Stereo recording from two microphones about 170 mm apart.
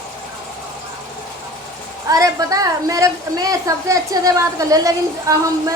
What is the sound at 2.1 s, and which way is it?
A woman's voice, 20° right (ahead or behind).